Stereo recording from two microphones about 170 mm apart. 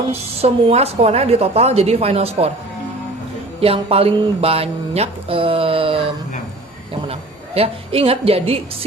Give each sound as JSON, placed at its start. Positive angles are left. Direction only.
{"t": 0.1, "sound": "a woman's voice", "side_deg": -35}
{"t": 3.6, "sound": "mantra", "side_deg": -35}
{"t": 7.1, "sound": "a woman's voice", "side_deg": -35}